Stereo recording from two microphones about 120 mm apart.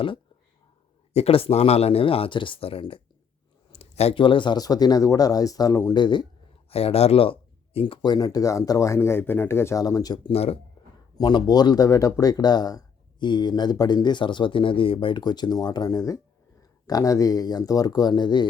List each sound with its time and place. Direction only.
1.1 s speech: 55° left (ahead or behind)
3.7 s a sound: 60° left (ahead or behind)
4.1 s speech: 45° left (ahead or behind); by 5.9 s 25° left (ahead or behind)
5.9 s speech: 40° left (ahead or behind)
6.7 s speech: 55° left (ahead or behind)
8.0 s speech: 35° left (ahead or behind)
10.3 s speech: 55° left (ahead or behind)
11.2 s speech: 35° left (ahead or behind)